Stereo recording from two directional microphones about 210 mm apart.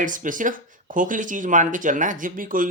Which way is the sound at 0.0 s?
40° right (ahead or behind).